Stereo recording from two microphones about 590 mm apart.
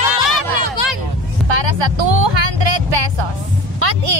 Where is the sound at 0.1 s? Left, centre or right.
Left.